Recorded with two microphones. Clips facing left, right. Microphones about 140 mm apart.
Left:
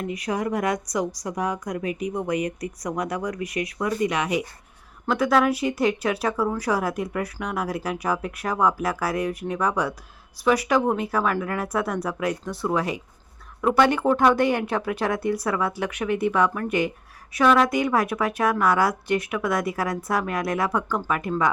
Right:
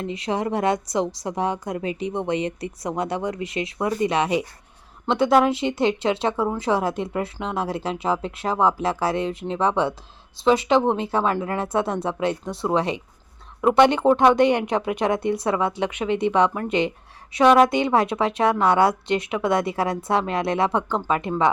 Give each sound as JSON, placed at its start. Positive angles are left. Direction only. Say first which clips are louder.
{"t": 0.0, "sound": "a woman's voice", "louder": "right 1 dB", "side_deg": -25}